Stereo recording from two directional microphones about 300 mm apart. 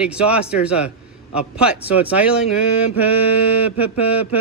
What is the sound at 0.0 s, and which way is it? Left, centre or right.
A man's voice, centre.